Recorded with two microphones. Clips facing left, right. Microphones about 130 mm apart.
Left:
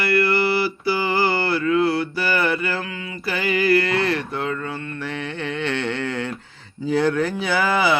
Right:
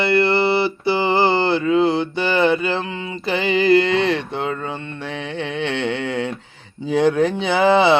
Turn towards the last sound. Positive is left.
turn(degrees=-25)  # may be behind; listen again after turning